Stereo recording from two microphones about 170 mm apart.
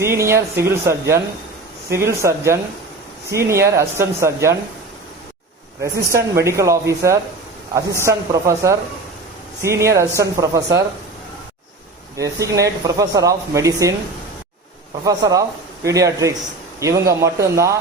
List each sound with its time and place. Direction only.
0.0 s speech: 15° right (ahead or behind)
3.7 s speech: 15° right (ahead or behind)
5.8 s speech: 15° right (ahead or behind)
12.1 s speech: 20° right (ahead or behind)
15.0 s speech: 20° right (ahead or behind)